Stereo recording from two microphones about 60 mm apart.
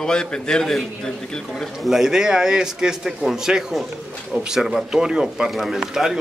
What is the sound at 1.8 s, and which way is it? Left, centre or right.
Speech, centre.